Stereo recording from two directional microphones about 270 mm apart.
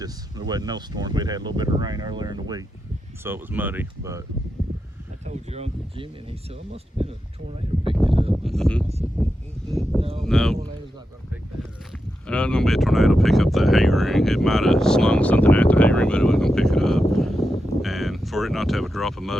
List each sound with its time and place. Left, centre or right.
0.0 s speech: centre
5.2 s speech: right
8.4 s speech: centre
12.3 s speech: centre